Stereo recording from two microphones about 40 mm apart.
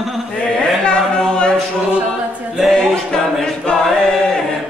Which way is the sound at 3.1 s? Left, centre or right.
Centre.